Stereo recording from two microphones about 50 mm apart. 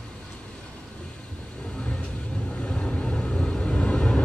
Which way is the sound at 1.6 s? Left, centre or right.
Centre.